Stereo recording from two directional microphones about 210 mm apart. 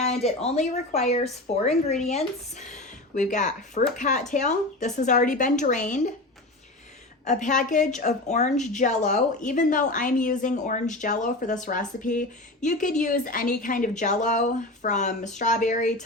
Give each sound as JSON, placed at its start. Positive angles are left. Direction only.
{"t": 0.0, "sound": "a woman's voice", "side_deg": 30}
{"t": 7.3, "sound": "a woman's voice", "side_deg": 35}